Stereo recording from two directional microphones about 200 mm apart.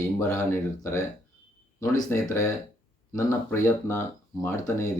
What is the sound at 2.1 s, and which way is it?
Speech, 15° left (ahead or behind).